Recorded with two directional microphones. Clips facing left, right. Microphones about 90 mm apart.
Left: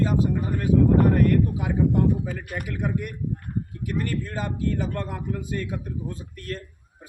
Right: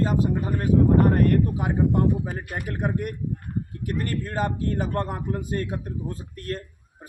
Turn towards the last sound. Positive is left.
turn(degrees=-40)  # may be behind; listen again after turning